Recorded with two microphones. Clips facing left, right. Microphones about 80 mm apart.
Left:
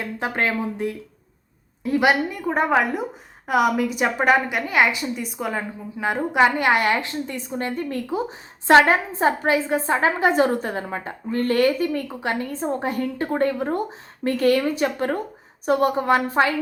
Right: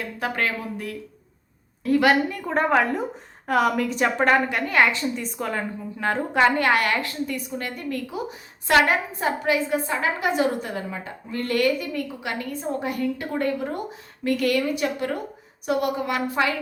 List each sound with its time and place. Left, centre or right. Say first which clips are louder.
0.2 s a woman's voice: left 3 dB; left